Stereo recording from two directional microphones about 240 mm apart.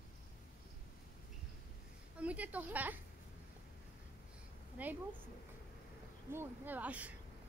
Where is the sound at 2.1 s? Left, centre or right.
Centre.